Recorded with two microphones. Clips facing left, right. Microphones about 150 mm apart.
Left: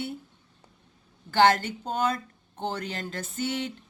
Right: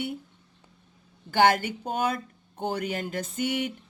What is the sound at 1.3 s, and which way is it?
Speech, 10° right (ahead or behind).